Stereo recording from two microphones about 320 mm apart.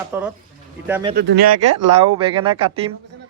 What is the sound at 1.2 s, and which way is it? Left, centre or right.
Speech, right.